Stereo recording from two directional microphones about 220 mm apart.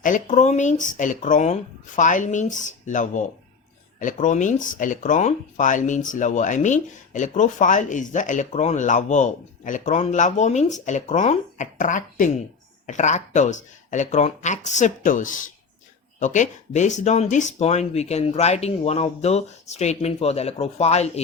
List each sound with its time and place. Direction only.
0.0 s speech: 35° left (ahead or behind)